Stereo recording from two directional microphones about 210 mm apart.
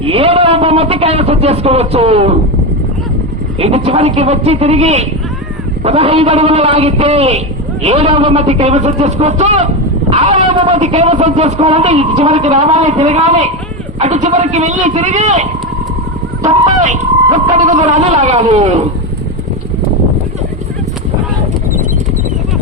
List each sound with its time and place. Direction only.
0.0 s a man's voice: 25° right (ahead or behind)
3.6 s a man's voice: 30° right (ahead or behind)
10.1 s cat: 35° right (ahead or behind)
10.4 s speech: 30° right (ahead or behind)
16.8 s speech: 35° right (ahead or behind)